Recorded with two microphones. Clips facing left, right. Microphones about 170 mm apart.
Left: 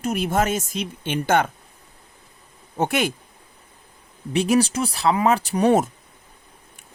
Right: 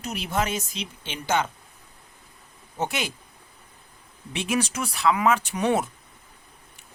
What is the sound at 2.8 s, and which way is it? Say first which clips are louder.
Speech: left 7 dB; 55° left (ahead or behind).